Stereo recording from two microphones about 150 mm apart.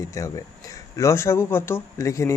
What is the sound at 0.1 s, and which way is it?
Speech, 20° left (ahead or behind).